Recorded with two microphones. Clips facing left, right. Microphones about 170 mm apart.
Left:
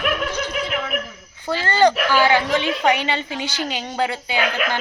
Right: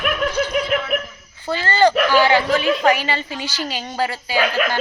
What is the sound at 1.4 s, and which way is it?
A woman's voice, 15° left (ahead or behind).